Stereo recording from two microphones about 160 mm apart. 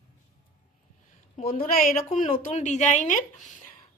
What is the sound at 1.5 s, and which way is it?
Speech, 60° left (ahead or behind).